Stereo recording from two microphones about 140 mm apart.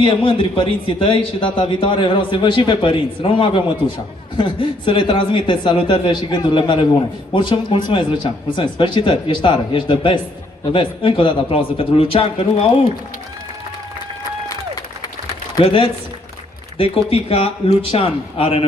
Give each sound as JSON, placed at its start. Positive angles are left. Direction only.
{"t": 0.0, "sound": "speech", "side_deg": 35}
{"t": 15.6, "sound": "speech", "side_deg": 40}